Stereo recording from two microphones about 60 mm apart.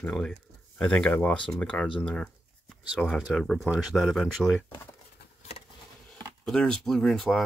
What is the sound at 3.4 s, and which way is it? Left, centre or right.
Speech, centre.